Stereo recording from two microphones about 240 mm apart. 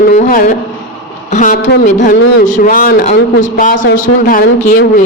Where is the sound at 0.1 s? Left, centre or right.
Left.